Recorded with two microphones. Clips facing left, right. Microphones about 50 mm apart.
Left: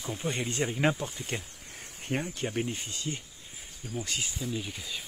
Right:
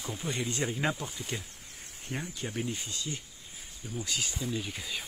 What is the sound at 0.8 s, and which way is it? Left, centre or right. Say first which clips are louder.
Speech: left 4 dB; left.